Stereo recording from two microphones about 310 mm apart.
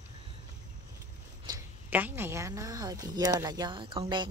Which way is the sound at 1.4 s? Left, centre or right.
Centre.